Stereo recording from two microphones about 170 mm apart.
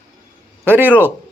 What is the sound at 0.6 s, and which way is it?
Speech, 10° right (ahead or behind).